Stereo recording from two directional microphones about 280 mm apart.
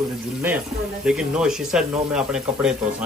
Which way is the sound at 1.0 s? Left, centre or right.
Centre.